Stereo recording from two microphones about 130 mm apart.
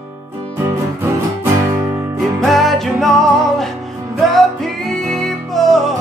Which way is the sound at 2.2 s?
Centre (ahead or behind).